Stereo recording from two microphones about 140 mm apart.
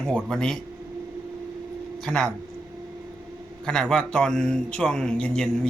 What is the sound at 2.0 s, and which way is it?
Speech, 5° left (ahead or behind).